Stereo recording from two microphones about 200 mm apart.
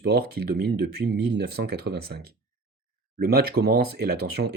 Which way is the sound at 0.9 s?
55° right (ahead or behind).